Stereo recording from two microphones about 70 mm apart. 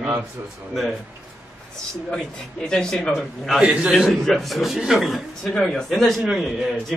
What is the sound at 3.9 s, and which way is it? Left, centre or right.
A man's voice, centre.